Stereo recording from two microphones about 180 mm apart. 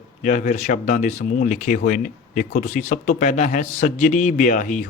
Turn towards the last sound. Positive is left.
turn(degrees=45)  # may be behind; listen again after turning